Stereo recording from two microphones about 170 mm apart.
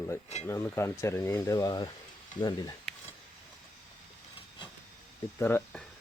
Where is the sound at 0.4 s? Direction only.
15° left (ahead or behind).